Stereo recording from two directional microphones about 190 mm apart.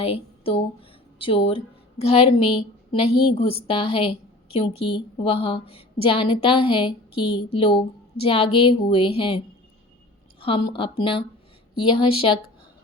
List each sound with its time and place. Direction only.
0.0 s a sound: 30° left (ahead or behind)
2.0 s a woman's voice: 35° left (ahead or behind)
10.4 s a woman's voice: 25° left (ahead or behind)